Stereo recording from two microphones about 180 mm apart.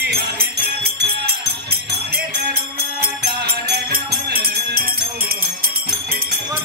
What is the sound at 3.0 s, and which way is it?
Music, 60° right (ahead or behind).